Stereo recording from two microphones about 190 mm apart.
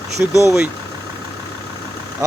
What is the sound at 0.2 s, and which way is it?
Speech, 15° right (ahead or behind).